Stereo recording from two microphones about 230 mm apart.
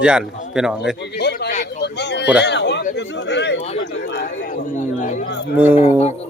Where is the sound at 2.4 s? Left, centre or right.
Left.